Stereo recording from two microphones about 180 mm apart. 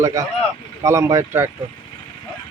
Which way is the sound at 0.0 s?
15° right (ahead or behind).